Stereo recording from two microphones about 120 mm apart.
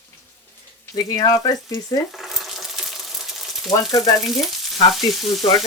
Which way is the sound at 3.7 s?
30° left (ahead or behind).